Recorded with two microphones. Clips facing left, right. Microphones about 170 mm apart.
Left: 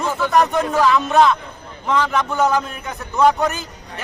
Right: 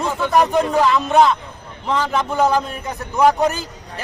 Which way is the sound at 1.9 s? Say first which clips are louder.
Left 1 dB; 30° right (ahead or behind).